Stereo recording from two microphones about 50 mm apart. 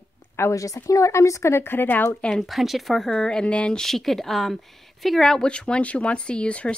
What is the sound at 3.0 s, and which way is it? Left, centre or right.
Speech, centre.